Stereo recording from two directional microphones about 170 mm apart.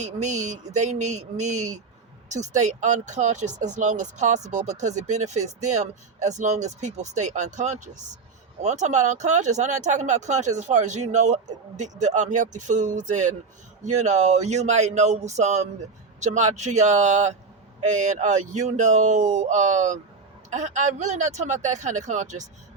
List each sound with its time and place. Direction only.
0.0 s speech: 45° right (ahead or behind)